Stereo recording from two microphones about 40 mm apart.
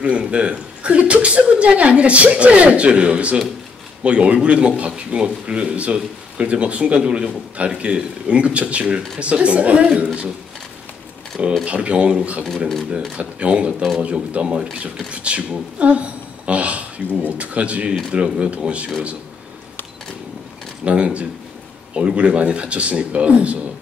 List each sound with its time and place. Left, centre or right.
0.0 s speech: right
10.0 s speech: right
11.6 s speech: right
20.8 s speech: right